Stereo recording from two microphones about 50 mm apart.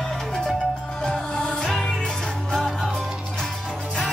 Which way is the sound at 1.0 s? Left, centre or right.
Centre.